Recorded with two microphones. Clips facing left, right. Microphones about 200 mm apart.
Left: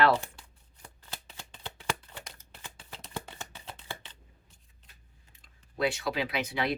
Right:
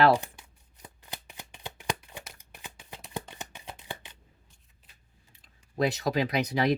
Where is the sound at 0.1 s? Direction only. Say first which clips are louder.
Right 3 dB; 15° right (ahead or behind).